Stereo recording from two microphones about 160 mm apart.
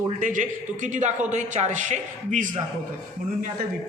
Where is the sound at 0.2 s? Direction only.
55° right (ahead or behind).